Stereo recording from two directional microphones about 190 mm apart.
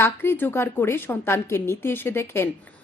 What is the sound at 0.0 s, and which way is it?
A woman's voice, 10° left (ahead or behind).